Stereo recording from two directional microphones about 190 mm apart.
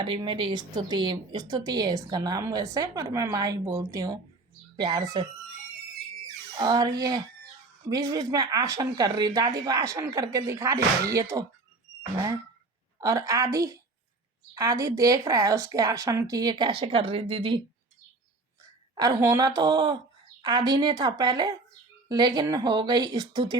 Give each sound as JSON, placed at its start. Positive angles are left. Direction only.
{"t": 0.0, "sound": "a woman's voice", "side_deg": -25}
{"t": 6.6, "sound": "a woman's voice", "side_deg": -25}
{"t": 18.9, "sound": "a woman's voice", "side_deg": -20}